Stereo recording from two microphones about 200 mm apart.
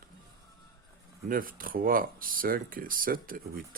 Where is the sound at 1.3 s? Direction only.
45° right (ahead or behind).